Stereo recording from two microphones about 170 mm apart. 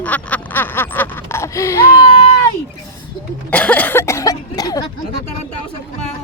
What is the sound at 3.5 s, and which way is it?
Cough, 10° left (ahead or behind).